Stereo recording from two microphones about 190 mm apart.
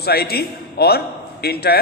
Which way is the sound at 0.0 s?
55° left (ahead or behind).